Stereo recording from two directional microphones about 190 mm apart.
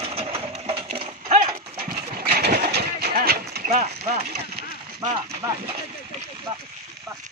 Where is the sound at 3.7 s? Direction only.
35° right (ahead or behind).